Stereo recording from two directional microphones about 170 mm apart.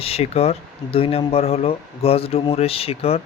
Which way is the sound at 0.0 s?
35° left (ahead or behind).